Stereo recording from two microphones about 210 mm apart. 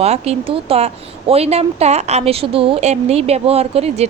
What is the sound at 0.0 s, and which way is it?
A woman's voice, 30° right (ahead or behind).